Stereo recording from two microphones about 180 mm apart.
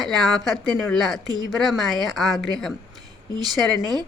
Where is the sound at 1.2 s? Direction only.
20° right (ahead or behind).